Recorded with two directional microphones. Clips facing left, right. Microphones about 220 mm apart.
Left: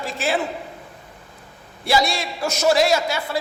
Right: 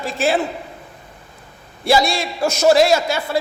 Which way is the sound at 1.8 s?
30° right (ahead or behind).